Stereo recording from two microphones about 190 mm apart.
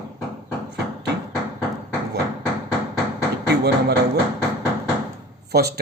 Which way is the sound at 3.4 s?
60° right (ahead or behind).